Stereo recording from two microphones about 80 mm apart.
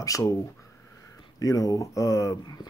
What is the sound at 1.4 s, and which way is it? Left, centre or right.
Speech, left.